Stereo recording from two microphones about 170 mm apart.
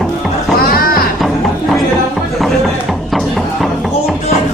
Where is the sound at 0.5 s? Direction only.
60° left (ahead or behind).